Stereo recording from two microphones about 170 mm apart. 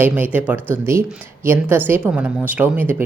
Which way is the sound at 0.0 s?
10° right (ahead or behind).